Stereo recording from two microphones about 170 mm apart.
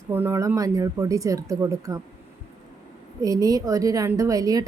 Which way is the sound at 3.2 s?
20° right (ahead or behind).